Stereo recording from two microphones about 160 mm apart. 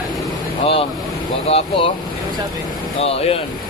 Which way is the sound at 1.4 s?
35° left (ahead or behind).